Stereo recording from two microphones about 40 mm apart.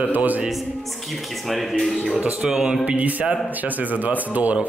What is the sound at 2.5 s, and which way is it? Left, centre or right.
Speech, centre.